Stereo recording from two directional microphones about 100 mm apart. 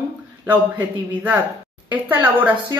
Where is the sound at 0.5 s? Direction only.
20° right (ahead or behind).